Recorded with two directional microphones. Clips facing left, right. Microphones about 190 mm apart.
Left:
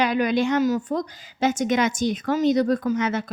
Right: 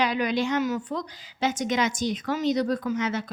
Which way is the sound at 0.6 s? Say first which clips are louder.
Left 5 dB; 40° left (ahead or behind).